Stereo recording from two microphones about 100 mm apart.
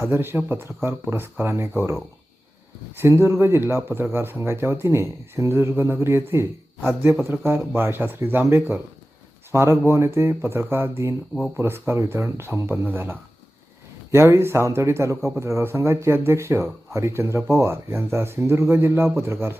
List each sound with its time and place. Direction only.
0.0 s speech: 25° right (ahead or behind)
3.0 s speech: 25° right (ahead or behind)